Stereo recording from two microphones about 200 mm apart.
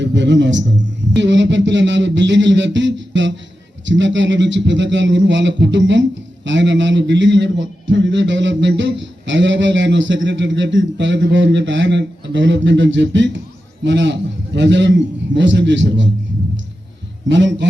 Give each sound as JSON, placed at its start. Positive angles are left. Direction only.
{"t": 0.0, "sound": "a man's voice", "side_deg": -65}
{"t": 17.2, "sound": "speech", "side_deg": -65}